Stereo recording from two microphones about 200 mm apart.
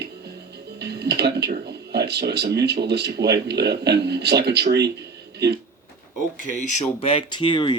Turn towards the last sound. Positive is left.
turn(degrees=25)  # may be behind; listen again after turning